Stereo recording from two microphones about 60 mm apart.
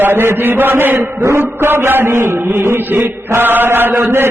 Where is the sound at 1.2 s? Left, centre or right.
Right.